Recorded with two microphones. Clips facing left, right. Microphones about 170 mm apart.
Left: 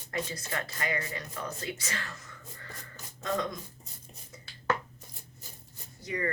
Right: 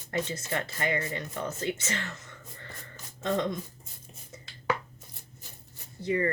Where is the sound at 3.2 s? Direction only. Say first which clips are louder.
Right 3 dB; 25° right (ahead or behind).